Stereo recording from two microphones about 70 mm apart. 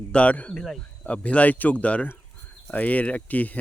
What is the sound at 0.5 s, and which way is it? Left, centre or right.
Speech, centre.